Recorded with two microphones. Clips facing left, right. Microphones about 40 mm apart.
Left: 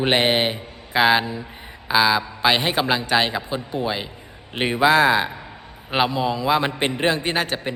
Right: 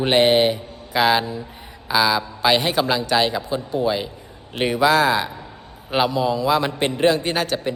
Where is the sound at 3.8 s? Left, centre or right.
Centre.